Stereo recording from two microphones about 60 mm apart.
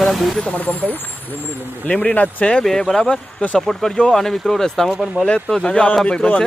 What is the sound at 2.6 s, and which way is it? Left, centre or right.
Speech, centre.